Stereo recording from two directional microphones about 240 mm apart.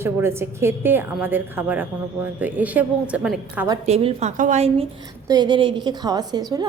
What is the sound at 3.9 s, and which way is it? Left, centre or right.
A woman's voice, right.